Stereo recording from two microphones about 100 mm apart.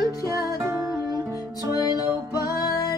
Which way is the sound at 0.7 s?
35° right (ahead or behind).